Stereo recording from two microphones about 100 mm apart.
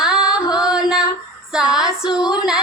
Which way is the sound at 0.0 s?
5° right (ahead or behind).